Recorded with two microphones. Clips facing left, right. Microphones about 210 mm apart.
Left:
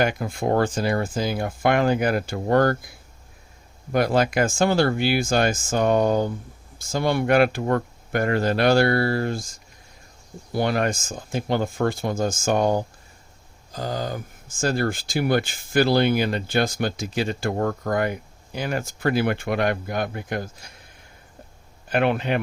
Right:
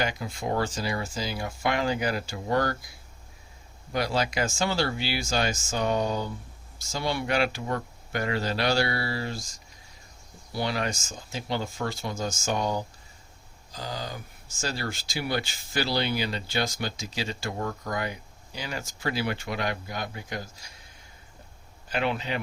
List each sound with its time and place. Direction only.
0.0 s speech: 55° left (ahead or behind)
21.8 s speech: 55° left (ahead or behind)